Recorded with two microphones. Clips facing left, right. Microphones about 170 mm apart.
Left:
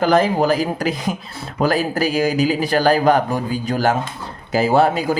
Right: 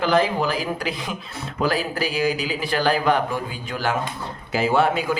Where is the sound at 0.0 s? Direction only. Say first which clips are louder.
Left 4 dB; 45° left (ahead or behind).